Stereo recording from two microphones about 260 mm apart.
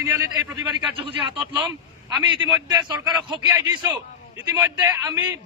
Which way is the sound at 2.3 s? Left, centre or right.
Centre.